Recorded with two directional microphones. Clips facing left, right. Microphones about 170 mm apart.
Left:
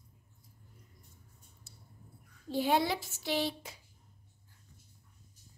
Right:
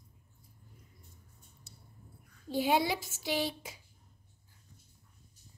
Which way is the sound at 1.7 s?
20° right (ahead or behind).